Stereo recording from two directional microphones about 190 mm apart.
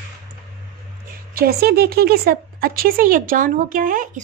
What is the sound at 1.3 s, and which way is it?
Speech, 55° right (ahead or behind).